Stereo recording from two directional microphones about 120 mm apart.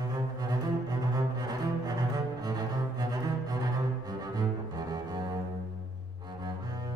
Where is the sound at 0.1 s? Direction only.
30° right (ahead or behind).